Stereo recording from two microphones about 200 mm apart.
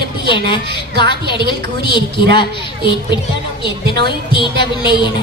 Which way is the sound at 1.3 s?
25° left (ahead or behind).